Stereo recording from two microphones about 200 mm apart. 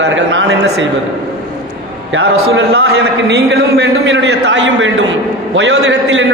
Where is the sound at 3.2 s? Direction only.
55° right (ahead or behind).